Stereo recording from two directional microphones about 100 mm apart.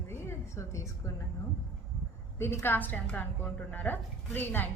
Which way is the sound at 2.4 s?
25° left (ahead or behind).